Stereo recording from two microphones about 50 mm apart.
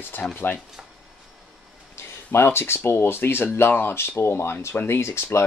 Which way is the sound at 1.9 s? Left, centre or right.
Left.